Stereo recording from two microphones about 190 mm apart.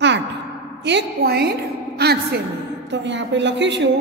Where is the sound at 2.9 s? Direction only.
70° right (ahead or behind).